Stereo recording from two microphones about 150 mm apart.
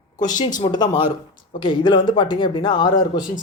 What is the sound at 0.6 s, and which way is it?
A woman's voice, 30° left (ahead or behind).